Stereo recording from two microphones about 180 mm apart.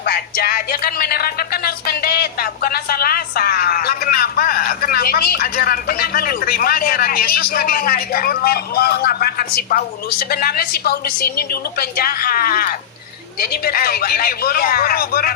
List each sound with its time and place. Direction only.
0.0 s speech: 55° left (ahead or behind)